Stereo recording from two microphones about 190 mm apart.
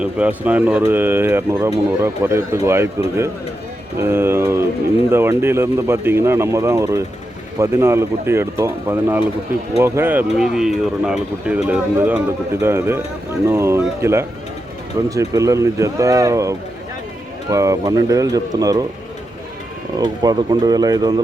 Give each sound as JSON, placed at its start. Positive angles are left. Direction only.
{"t": 0.0, "sound": "speech", "side_deg": -5}
{"t": 4.0, "sound": "speech", "side_deg": -10}
{"t": 20.0, "sound": "speech", "side_deg": -20}